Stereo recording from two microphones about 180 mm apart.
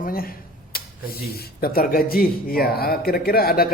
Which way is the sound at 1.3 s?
55° left (ahead or behind).